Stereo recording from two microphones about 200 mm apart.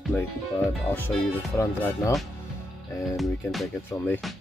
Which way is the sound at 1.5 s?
15° left (ahead or behind).